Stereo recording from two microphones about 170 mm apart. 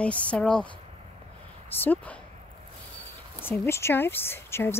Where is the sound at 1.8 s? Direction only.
10° left (ahead or behind).